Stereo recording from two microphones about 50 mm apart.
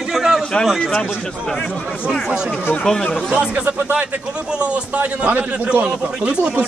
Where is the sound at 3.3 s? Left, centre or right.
Right.